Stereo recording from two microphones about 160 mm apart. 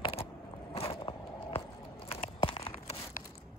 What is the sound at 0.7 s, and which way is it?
Biting, 35° left (ahead or behind).